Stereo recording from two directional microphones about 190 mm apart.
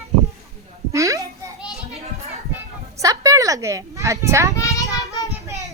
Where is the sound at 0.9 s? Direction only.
15° right (ahead or behind).